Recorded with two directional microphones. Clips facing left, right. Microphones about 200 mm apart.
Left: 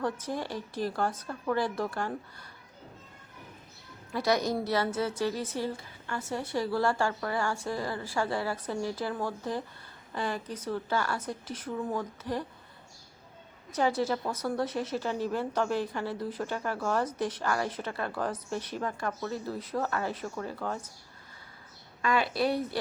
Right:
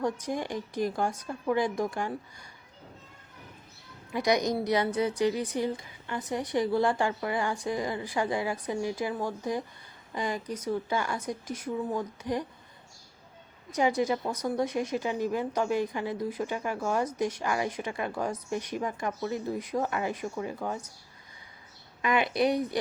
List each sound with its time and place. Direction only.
0.0 s speech: 15° right (ahead or behind)
4.1 s speech: 15° right (ahead or behind)
13.7 s speech: 15° right (ahead or behind)
22.0 s speech: 20° right (ahead or behind)